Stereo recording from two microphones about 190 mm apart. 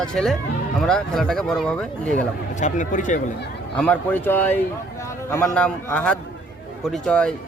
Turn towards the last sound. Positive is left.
turn(degrees=5)  # may be behind; listen again after turning